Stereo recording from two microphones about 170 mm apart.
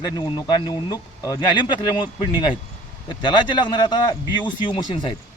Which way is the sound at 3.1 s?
25° left (ahead or behind).